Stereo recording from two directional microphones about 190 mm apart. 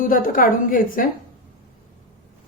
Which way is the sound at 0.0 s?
45° left (ahead or behind).